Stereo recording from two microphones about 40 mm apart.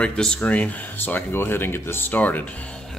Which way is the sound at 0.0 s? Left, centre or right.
Left.